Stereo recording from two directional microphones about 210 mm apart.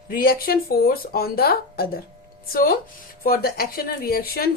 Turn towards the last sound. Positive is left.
turn(degrees=45)  # may be behind; listen again after turning